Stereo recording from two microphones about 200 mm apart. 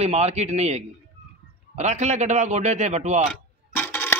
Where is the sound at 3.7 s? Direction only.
10° left (ahead or behind).